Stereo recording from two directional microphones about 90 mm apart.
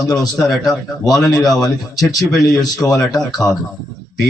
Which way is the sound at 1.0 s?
45° left (ahead or behind).